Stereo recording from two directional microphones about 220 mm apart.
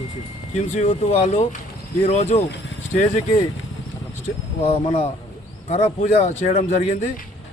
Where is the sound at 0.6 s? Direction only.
30° left (ahead or behind).